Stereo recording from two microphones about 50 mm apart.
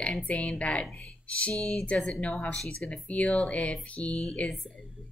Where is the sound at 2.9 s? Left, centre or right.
Left.